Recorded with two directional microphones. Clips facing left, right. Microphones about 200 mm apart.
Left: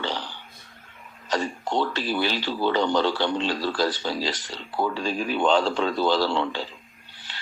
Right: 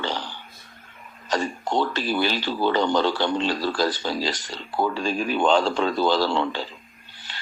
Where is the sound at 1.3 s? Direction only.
45° right (ahead or behind).